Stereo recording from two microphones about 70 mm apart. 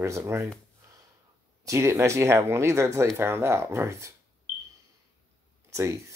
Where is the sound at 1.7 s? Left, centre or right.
Right.